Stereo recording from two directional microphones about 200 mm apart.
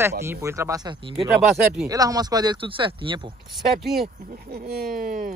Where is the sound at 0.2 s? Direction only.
15° right (ahead or behind).